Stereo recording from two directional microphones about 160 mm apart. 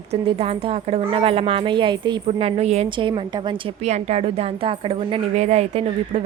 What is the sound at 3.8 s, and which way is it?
A woman's voice, 45° right (ahead or behind).